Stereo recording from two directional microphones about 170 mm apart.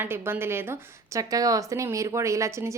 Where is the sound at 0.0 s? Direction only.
15° right (ahead or behind).